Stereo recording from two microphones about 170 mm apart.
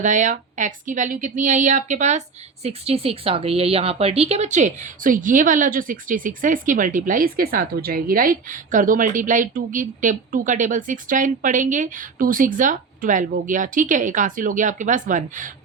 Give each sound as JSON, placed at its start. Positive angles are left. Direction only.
{"t": 0.0, "sound": "speech", "side_deg": -45}